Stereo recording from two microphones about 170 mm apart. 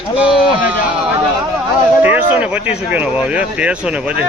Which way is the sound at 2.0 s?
10° right (ahead or behind).